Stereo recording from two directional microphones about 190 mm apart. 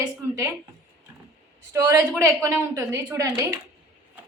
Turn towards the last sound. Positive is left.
turn(degrees=-15)  # may be behind; listen again after turning